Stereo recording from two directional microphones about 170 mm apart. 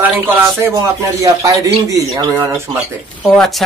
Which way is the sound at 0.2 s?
15° right (ahead or behind).